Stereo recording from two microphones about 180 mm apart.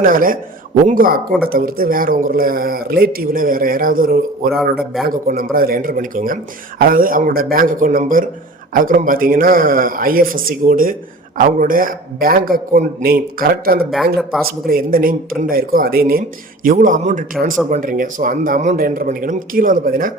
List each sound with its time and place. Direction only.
0.0 s a man's voice: 50° right (ahead or behind)
14.2 s speech: centre (ahead or behind)
14.7 s a man's voice: 55° right (ahead or behind)